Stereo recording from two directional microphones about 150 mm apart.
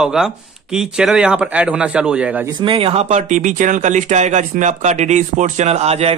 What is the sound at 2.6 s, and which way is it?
Speech, 40° right (ahead or behind).